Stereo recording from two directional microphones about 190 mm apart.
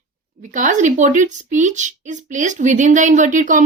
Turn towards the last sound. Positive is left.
turn(degrees=-40)  # may be behind; listen again after turning